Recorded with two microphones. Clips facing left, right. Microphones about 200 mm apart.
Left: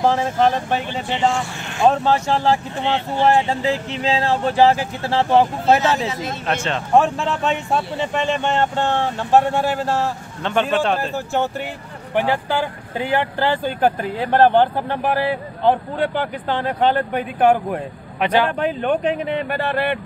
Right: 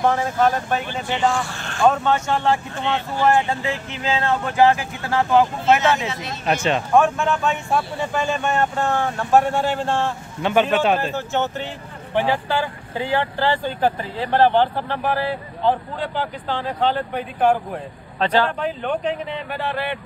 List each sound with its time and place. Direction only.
0.0 s speech: 30° left (ahead or behind)
1.9 s speech: 35° left (ahead or behind)
6.4 s speech: 10° right (ahead or behind)
6.9 s speech: 30° left (ahead or behind)
9.6 s speech: 5° left (ahead or behind)
10.4 s speech: 5° right (ahead or behind)
11.1 s speech: 10° left (ahead or behind)
13.7 s speech: 55° left (ahead or behind)
18.2 s speech: 15° left (ahead or behind)
18.6 s speech: 60° left (ahead or behind)